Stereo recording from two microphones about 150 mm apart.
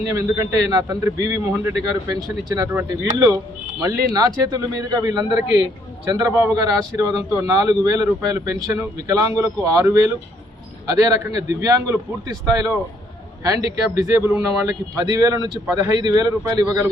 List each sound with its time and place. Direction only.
0.1 s a man's voice: 20° right (ahead or behind)